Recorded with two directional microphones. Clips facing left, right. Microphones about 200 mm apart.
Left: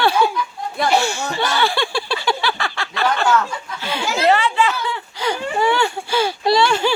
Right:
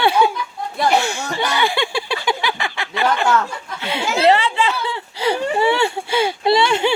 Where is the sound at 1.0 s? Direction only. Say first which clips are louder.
Left 1 dB; 15° right (ahead or behind).